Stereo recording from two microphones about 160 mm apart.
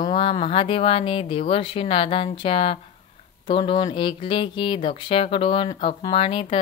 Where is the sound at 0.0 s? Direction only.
35° left (ahead or behind).